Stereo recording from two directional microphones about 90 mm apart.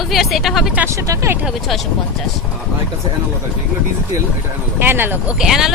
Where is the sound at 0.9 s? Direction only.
35° right (ahead or behind).